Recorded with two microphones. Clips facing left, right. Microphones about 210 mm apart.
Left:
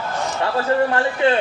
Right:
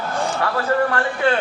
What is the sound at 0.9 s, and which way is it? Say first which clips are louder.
Speech: left 2 dB; 20° left (ahead or behind).